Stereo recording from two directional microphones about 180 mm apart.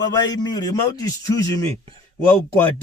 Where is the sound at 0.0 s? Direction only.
25° left (ahead or behind).